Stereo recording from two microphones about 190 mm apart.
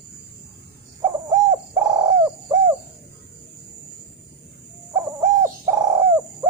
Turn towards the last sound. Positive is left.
turn(degrees=-10)  # may be behind; listen again after turning